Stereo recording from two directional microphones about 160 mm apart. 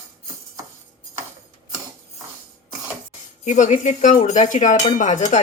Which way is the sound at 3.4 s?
50° left (ahead or behind).